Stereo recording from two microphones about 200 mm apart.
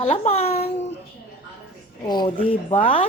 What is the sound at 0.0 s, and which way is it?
Speech, 30° left (ahead or behind).